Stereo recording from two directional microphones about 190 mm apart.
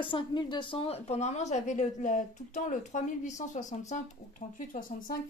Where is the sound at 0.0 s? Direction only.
25° left (ahead or behind).